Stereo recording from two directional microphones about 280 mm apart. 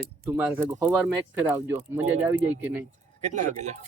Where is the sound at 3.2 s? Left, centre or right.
Right.